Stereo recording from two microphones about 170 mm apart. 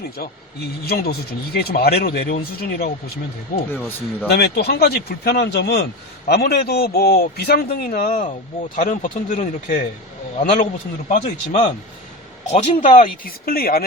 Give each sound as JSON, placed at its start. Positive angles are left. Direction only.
{"t": 0.2, "sound": "a man's voice", "side_deg": 65}
{"t": 3.7, "sound": "speech", "side_deg": 10}
{"t": 4.3, "sound": "a man's voice", "side_deg": 75}
{"t": 11.1, "sound": "speech", "side_deg": 45}
{"t": 12.5, "sound": "speech", "side_deg": 35}
{"t": 12.8, "sound": "a man's voice", "side_deg": 50}